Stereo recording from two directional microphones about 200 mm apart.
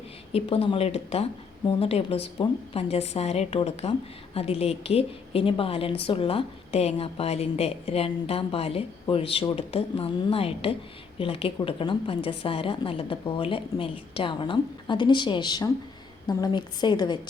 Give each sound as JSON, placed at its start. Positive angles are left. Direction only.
{"t": 0.3, "sound": "a woman's voice", "side_deg": 30}